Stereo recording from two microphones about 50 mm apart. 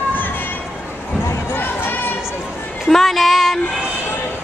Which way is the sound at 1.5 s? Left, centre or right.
Left.